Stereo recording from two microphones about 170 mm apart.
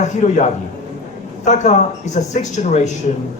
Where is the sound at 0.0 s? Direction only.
45° left (ahead or behind).